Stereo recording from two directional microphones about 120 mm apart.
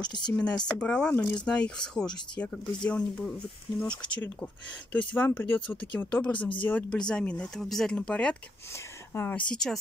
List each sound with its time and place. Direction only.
0.0 s speech: 40° left (ahead or behind)
0.3 s speech: 10° left (ahead or behind)
9.1 s speech: 20° left (ahead or behind)
9.5 s speech: 5° left (ahead or behind)